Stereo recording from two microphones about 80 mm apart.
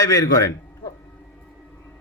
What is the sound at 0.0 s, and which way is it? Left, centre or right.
Speech, left.